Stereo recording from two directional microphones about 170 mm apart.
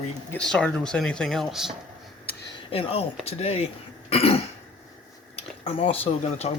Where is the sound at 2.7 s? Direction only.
35° left (ahead or behind).